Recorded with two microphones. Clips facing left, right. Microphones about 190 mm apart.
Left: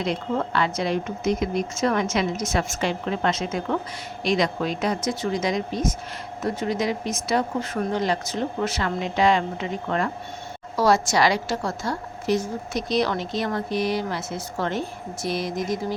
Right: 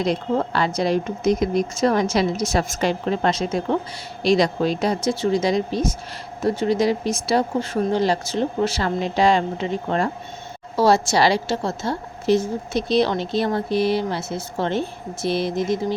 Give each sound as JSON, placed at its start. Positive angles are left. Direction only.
{"t": 0.0, "sound": "a woman's voice", "side_deg": -35}